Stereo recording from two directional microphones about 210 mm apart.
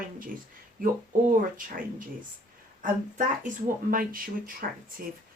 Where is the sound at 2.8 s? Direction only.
40° right (ahead or behind).